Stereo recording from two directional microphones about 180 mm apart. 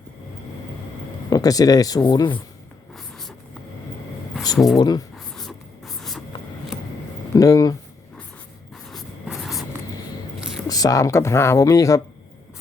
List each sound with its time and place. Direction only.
1.3 s speech: 20° left (ahead or behind)
2.9 s a sound: centre (ahead or behind)
4.5 s speech: centre (ahead or behind)
4.8 s speech: 20° left (ahead or behind)
5.1 s a sound: centre (ahead or behind)
7.3 s speech: 20° left (ahead or behind)
8.7 s writing: centre (ahead or behind)
10.7 s speech: 20° left (ahead or behind)